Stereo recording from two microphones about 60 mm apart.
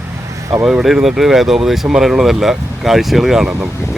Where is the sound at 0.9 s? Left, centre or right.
Centre.